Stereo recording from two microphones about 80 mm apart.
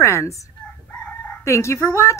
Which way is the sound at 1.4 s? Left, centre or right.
Left.